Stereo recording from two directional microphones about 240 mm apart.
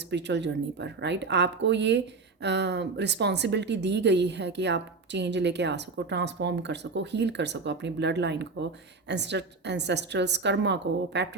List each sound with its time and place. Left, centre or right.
0.1 s speech: right